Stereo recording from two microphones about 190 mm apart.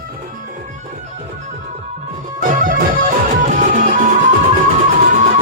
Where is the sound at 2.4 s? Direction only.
45° right (ahead or behind).